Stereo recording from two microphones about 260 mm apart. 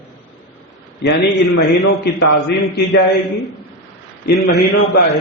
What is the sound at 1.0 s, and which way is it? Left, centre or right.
A man's voice, left.